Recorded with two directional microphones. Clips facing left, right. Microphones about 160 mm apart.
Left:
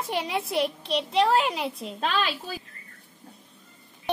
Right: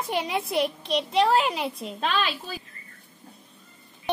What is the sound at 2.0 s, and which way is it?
Speech, 40° left (ahead or behind).